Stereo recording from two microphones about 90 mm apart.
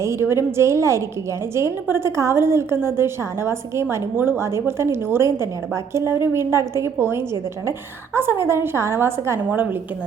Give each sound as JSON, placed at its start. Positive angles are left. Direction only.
{"t": 0.0, "sound": "a woman's voice", "side_deg": -30}